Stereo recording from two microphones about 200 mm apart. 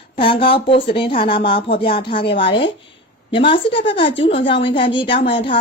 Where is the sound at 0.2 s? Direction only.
25° left (ahead or behind).